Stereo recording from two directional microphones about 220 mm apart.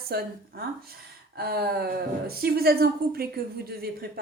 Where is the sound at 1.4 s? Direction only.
45° right (ahead or behind).